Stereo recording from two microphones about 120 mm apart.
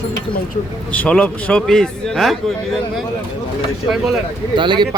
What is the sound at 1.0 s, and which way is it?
A man's voice, 10° left (ahead or behind).